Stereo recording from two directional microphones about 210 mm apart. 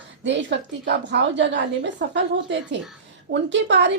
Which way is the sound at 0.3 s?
55° right (ahead or behind).